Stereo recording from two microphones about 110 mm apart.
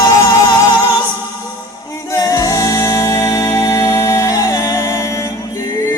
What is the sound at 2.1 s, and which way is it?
Music, 30° left (ahead or behind).